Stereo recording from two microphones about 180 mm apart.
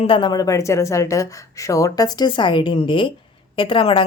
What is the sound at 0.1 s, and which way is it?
Speech, 25° left (ahead or behind).